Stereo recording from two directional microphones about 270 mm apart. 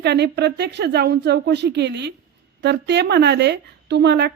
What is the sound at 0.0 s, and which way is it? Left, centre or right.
Speech, right.